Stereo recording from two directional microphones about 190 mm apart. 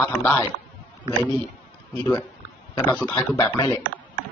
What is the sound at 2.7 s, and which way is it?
Speech, 10° left (ahead or behind).